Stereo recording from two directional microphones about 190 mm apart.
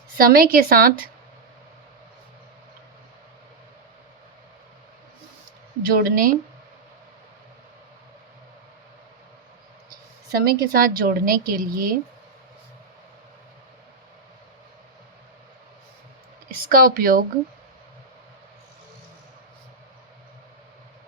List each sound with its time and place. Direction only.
0.2 s speech: 50° right (ahead or behind)
5.9 s speech: 50° right (ahead or behind)
10.3 s speech: 50° right (ahead or behind)
16.5 s speech: 50° right (ahead or behind)